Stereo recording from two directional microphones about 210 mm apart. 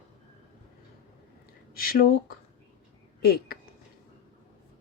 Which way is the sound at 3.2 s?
50° left (ahead or behind).